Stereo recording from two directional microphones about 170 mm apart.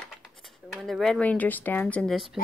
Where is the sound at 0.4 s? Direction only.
Centre (ahead or behind).